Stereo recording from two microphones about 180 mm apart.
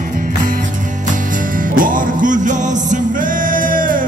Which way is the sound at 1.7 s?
50° right (ahead or behind).